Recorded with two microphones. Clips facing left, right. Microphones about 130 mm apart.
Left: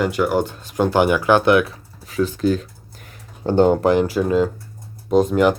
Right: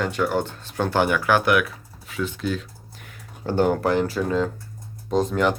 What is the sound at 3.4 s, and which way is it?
Speech, 25° left (ahead or behind).